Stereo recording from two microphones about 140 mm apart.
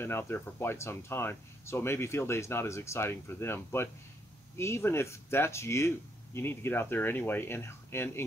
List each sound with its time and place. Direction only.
0.0 s speech: 15° left (ahead or behind)